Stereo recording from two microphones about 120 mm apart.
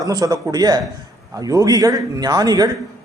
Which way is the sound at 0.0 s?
30° right (ahead or behind).